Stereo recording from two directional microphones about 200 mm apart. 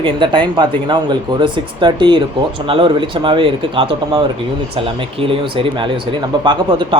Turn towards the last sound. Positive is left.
turn(degrees=-25)  # may be behind; listen again after turning